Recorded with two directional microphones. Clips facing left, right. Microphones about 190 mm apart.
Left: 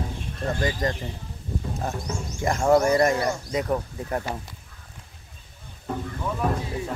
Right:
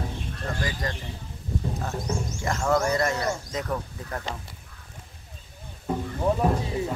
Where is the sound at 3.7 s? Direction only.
25° left (ahead or behind).